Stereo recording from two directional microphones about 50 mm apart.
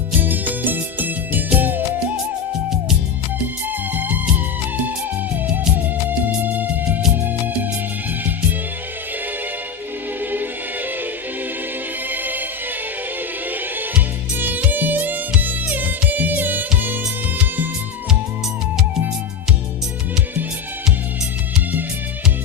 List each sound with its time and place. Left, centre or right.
0.2 s music: right
3.4 s music: right
6.1 s music: right
10.2 s music: right
12.1 s music: right
14.3 s music: right